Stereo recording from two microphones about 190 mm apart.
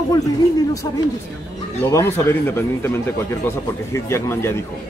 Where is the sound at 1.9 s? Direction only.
15° left (ahead or behind).